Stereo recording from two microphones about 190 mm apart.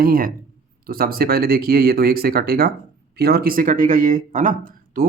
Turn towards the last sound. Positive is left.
turn(degrees=-45)  # may be behind; listen again after turning